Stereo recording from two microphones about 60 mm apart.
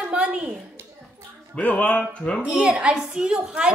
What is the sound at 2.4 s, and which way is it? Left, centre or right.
A woman's voice, centre.